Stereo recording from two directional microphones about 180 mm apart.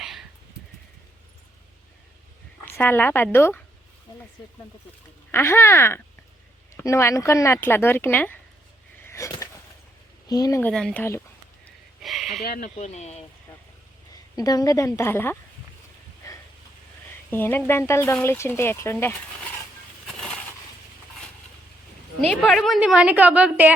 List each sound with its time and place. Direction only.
0.0 s a sound: centre (ahead or behind)
2.6 s a woman's voice: 10° left (ahead or behind)
5.3 s speech: 15° left (ahead or behind)
9.0 s a sound: 15° left (ahead or behind)
10.2 s speech: 20° left (ahead or behind)
10.6 s speech: 5° left (ahead or behind)
12.0 s a sound: centre (ahead or behind)
12.4 s speech: 55° left (ahead or behind)
12.7 s speech: 40° left (ahead or behind)
14.1 s a woman's voice: 20° left (ahead or behind)
17.3 s speech: 10° left (ahead or behind)
22.3 s a woman's voice: centre (ahead or behind)